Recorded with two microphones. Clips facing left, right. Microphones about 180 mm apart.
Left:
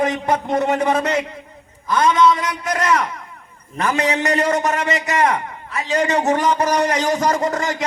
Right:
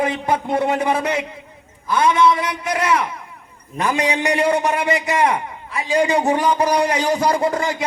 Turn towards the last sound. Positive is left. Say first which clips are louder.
# right 1 dB
turn(degrees=-10)  # may be behind; listen again after turning